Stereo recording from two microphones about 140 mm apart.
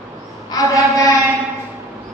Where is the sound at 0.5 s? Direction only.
25° left (ahead or behind).